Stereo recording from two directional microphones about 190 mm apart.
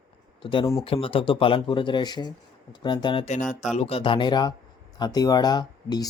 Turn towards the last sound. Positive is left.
turn(degrees=20)  # may be behind; listen again after turning